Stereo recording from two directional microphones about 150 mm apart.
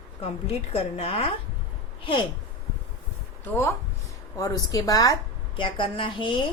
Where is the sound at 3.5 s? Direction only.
15° left (ahead or behind); by 6.5 s 35° left (ahead or behind).